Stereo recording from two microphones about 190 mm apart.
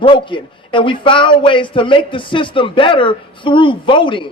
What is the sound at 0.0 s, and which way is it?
A man's voice, 25° left (ahead or behind).